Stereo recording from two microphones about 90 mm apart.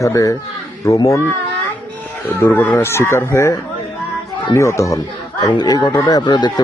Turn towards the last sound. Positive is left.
turn(degrees=55)  # may be behind; listen again after turning